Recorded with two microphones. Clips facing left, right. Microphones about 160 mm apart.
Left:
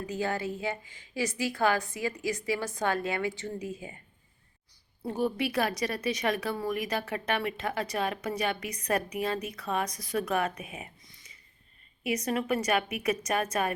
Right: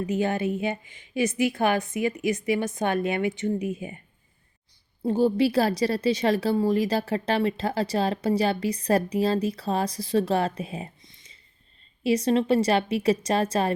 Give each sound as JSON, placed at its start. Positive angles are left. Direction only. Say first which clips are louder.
{"t": 0.0, "sound": "a woman's voice", "louder": "right 6 dB", "side_deg": -20}
{"t": 5.0, "sound": "a woman's voice", "louder": "right 8 dB", "side_deg": -30}